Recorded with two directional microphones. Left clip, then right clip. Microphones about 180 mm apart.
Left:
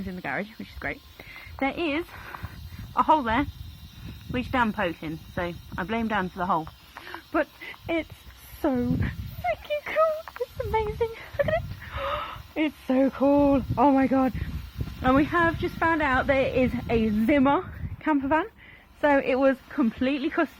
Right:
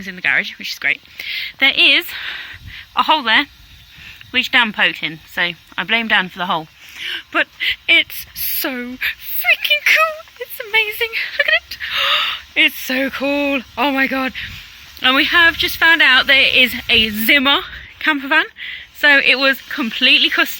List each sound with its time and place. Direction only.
0.0 s a woman's voice: 5° right (ahead or behind)
6.3 s speech: 20° right (ahead or behind)
7.1 s a woman's voice: 5° right (ahead or behind)